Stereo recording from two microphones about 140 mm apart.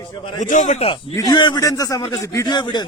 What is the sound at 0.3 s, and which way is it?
Speech, 65° left (ahead or behind).